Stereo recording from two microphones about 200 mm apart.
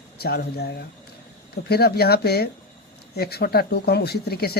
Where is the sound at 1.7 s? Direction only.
50° left (ahead or behind).